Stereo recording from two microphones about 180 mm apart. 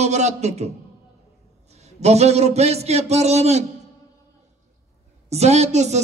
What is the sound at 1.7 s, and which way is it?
A man's voice, 35° right (ahead or behind).